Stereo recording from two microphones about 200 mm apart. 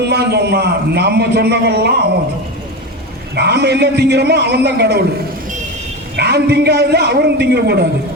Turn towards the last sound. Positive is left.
turn(degrees=-55)  # may be behind; listen again after turning